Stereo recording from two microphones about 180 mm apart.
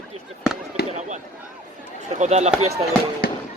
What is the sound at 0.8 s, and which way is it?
Fireworks, 65° left (ahead or behind).